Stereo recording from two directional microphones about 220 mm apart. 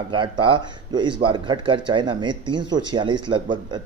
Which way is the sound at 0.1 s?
20° right (ahead or behind).